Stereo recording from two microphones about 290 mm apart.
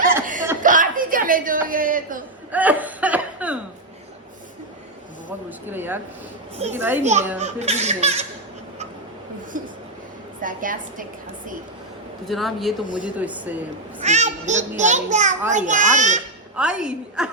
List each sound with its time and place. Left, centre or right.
0.6 s a sound: right
1.6 s a child's voice: right
2.5 s chuckle: centre
5.5 s speech: centre
7.0 s a child's voice: right
10.4 s a child's voice: right
12.2 s a woman's voice: centre
12.8 s speech: left
13.1 s a woman's voice: centre
14.0 s a child's voice: right
16.6 s a woman's voice: centre